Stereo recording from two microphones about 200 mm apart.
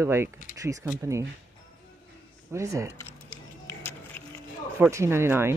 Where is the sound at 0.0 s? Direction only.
10° right (ahead or behind).